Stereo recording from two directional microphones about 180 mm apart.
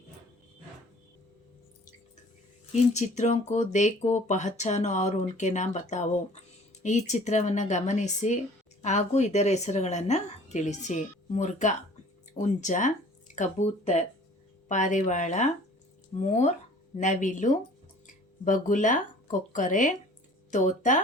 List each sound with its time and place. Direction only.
2.7 s speech: 40° left (ahead or behind)